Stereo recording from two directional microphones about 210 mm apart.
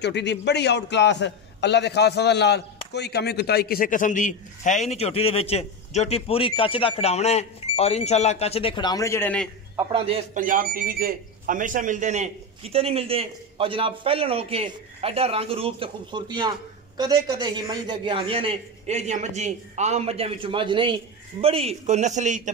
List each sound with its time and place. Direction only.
0.0 s a man's voice: 55° left (ahead or behind); by 9.5 s 10° left (ahead or behind)
10.0 s speech: 30° right (ahead or behind)